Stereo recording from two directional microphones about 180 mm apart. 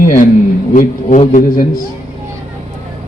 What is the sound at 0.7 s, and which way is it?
Speech, 45° left (ahead or behind).